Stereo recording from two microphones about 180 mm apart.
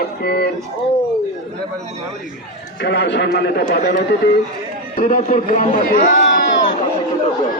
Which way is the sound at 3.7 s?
60° left (ahead or behind).